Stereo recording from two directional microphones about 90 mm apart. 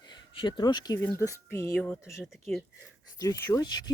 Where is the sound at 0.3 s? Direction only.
70° left (ahead or behind).